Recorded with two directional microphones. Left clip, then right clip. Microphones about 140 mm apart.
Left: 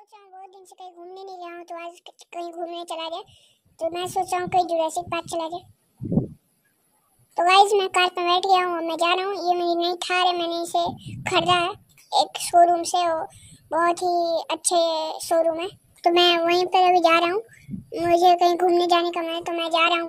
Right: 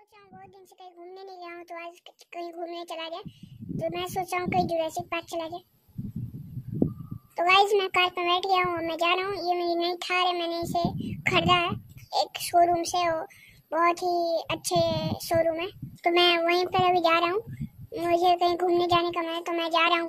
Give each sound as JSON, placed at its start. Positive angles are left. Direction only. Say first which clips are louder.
{"t": 0.4, "sound": "a child's voice", "louder": "left 7 dB", "side_deg": 15}
{"t": 7.3, "sound": "a child's voice", "louder": "left 5 dB", "side_deg": 15}